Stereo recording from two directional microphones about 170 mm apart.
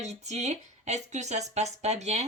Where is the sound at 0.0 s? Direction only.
40° right (ahead or behind).